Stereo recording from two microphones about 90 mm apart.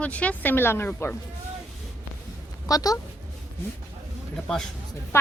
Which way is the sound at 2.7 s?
40° left (ahead or behind).